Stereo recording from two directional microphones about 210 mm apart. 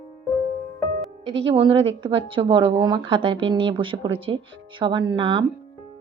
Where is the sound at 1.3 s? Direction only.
25° right (ahead or behind).